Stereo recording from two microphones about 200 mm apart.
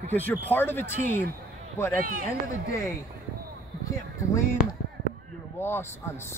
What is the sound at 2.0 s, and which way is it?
Speech, 45° right (ahead or behind).